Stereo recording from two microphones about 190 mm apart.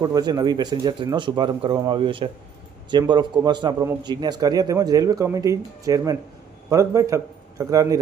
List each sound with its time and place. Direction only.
0.0 s a man's voice: 20° right (ahead or behind)